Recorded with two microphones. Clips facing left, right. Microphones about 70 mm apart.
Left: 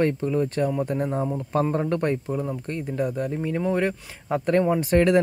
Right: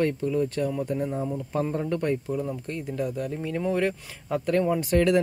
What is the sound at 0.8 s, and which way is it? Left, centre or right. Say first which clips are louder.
Speech: left 3 dB; left.